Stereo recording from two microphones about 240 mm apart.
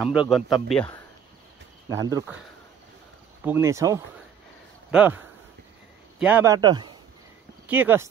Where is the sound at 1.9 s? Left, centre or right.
Centre.